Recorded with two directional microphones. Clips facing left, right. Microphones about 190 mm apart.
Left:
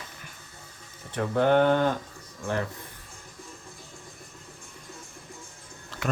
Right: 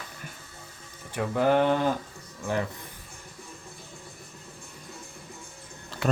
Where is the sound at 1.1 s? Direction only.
5° right (ahead or behind).